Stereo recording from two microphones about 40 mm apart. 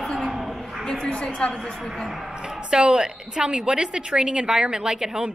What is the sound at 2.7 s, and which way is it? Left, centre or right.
A woman's voice, right.